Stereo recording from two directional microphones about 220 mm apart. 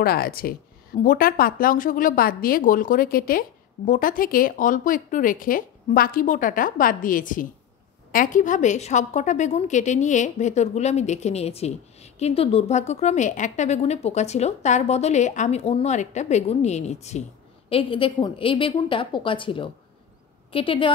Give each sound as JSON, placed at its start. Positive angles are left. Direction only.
{"t": 0.0, "sound": "a woman's voice", "side_deg": 45}